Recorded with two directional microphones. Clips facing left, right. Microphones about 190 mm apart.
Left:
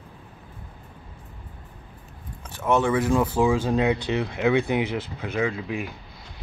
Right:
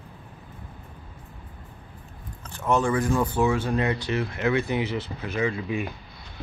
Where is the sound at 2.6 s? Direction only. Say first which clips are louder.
Left 2 dB; 5° left (ahead or behind).